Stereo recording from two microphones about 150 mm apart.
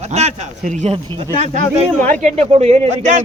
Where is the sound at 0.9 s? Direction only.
35° right (ahead or behind).